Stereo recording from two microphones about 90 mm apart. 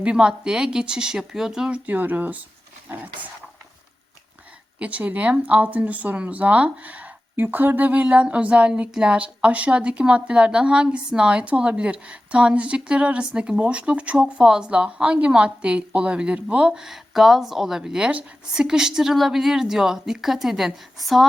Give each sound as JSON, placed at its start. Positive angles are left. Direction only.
{"t": 0.0, "sound": "speech", "side_deg": -10}
{"t": 4.8, "sound": "speech", "side_deg": -15}